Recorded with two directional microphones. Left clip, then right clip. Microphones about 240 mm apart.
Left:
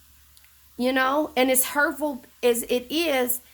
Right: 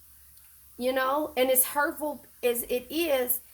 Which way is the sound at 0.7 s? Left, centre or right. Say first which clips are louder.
Left 4 dB; left.